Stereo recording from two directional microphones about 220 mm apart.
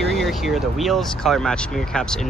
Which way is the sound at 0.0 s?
Centre (ahead or behind).